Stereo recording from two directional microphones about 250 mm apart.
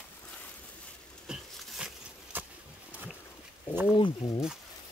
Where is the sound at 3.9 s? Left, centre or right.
Centre.